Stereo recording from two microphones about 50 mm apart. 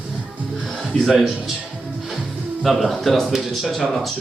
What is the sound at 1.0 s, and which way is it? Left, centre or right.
Speech, centre.